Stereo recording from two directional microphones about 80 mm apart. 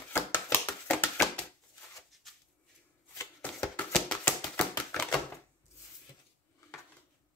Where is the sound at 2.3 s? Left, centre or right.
Centre.